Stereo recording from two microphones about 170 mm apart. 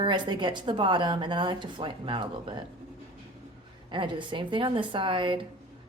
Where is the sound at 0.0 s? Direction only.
25° right (ahead or behind).